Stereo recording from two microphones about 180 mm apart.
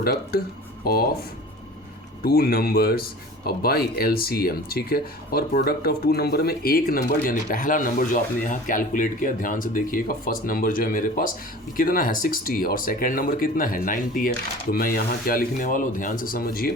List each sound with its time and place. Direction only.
0.0 s speech: 55° left (ahead or behind)
2.2 s speech: 55° left (ahead or behind)